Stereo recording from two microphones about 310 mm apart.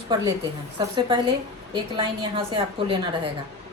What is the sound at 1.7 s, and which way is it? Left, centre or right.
A woman's voice, centre.